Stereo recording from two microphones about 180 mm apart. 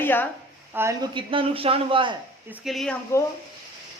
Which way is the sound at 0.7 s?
15° right (ahead or behind).